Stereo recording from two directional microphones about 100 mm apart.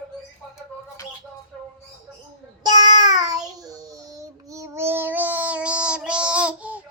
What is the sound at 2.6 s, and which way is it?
Child singing, 40° right (ahead or behind).